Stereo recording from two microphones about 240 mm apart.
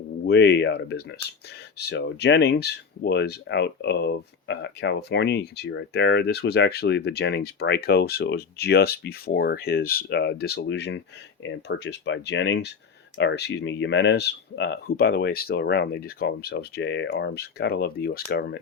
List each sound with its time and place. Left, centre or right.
0.3 s speech: left